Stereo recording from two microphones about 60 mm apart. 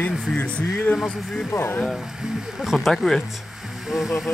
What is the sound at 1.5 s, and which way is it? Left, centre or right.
Speech, left.